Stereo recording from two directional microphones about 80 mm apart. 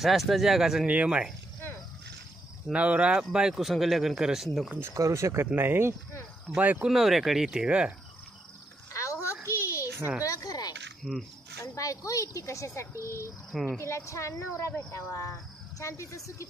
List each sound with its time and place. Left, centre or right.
0.0 s speech: centre
0.8 s speech: centre
2.7 s speech: centre
4.9 s speech: right
6.9 s speech: centre
8.9 s a sound: left
10.2 s speech: left
11.0 s speech: centre
11.6 s speech: left
13.5 s speech: centre
13.7 s speech: left